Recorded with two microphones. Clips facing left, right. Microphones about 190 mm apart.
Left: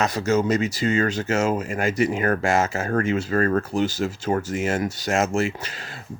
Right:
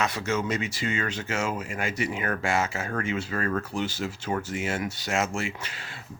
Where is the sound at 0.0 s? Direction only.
40° left (ahead or behind).